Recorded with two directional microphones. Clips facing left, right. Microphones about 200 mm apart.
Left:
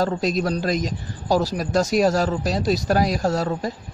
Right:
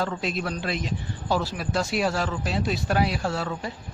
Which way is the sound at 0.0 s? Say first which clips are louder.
Left 6 dB; 40° left (ahead or behind).